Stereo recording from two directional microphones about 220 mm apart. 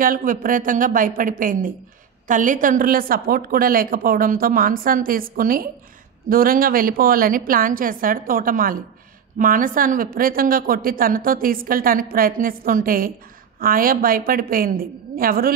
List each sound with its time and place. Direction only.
0.0 s a woman's voice: 40° right (ahead or behind)